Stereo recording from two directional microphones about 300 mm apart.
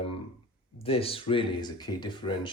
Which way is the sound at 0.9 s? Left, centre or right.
Centre.